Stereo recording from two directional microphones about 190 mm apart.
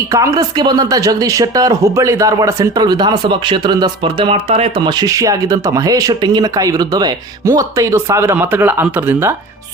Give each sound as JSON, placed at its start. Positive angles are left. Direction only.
{"t": 0.1, "sound": "speech", "side_deg": -15}